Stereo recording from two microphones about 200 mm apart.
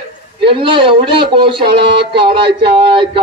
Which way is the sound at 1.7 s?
55° right (ahead or behind).